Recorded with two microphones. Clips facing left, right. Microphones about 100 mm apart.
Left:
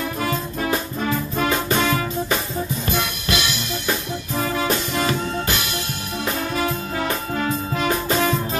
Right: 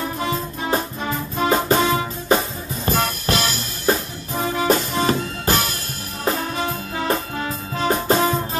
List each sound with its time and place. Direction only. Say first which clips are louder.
0.2 s music: left 1 dB; 25° right (ahead or behind)
7.7 s music: right 5 dB; 30° right (ahead or behind)